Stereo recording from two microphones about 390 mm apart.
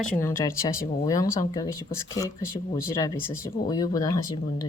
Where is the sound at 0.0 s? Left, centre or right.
Centre.